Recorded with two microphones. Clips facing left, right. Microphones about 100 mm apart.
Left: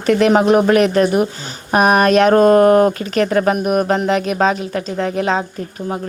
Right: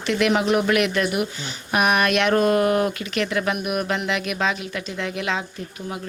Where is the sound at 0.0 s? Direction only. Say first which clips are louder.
Left 8 dB; 40° left (ahead or behind).